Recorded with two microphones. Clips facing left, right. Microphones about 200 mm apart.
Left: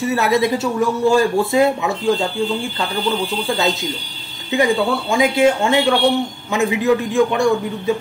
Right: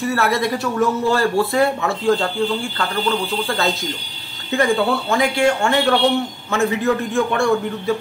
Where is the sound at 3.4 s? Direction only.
20° left (ahead or behind).